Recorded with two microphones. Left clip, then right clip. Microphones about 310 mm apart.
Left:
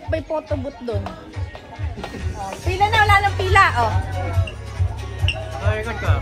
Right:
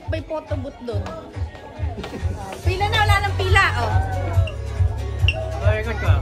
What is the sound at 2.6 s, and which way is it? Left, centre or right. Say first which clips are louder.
Speech: left 4 dB; centre.